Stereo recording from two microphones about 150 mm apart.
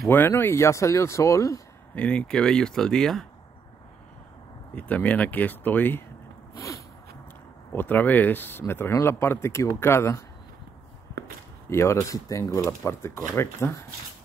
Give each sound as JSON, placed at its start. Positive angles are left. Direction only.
{"t": 0.1, "sound": "speech", "side_deg": 15}
{"t": 2.0, "sound": "speech", "side_deg": 5}
{"t": 4.7, "sound": "speech", "side_deg": 10}
{"t": 7.7, "sound": "speech", "side_deg": 15}
{"t": 11.7, "sound": "speech", "side_deg": 20}